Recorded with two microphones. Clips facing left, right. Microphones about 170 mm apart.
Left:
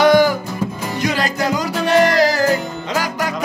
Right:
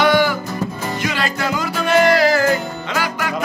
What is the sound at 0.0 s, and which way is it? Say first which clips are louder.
Music: left 3 dB; 40° left (ahead or behind).